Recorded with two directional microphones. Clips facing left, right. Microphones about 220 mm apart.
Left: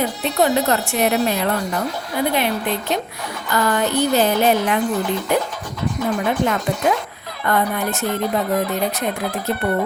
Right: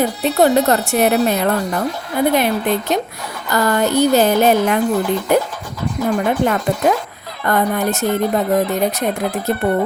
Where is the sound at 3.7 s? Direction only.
40° right (ahead or behind).